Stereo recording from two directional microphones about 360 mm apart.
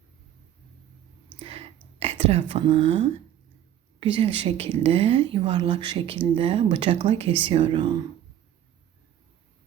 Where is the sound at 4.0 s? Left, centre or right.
Centre.